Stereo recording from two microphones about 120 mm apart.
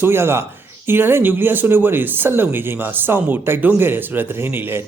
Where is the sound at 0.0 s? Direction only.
20° right (ahead or behind).